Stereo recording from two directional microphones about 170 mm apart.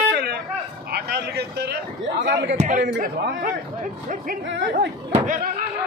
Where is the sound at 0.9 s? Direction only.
75° right (ahead or behind).